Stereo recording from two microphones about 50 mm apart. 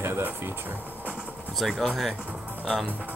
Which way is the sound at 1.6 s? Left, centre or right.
Centre.